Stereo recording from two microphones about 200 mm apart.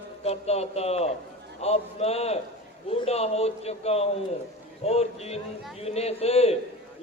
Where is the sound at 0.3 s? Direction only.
30° left (ahead or behind).